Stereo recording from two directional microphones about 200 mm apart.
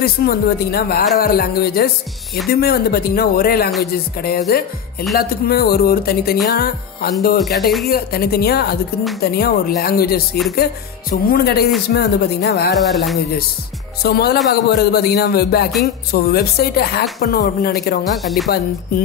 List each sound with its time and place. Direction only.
0.0 s speech: 50° left (ahead or behind)
12.7 s speech: centre (ahead or behind)
14.0 s speech: 50° left (ahead or behind)
18.2 s speech: centre (ahead or behind)